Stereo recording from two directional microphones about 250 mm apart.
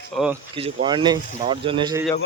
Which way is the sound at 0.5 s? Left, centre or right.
Right.